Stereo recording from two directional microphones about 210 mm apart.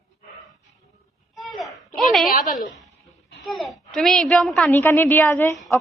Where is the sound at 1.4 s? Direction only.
Centre (ahead or behind).